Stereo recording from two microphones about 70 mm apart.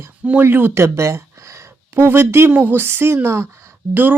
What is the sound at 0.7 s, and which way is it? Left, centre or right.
A woman's voice, right.